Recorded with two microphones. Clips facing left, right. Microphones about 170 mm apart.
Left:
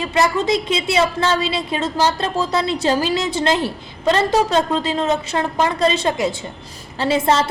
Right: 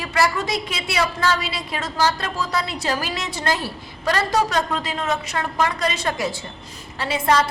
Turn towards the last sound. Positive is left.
turn(degrees=25)  # may be behind; listen again after turning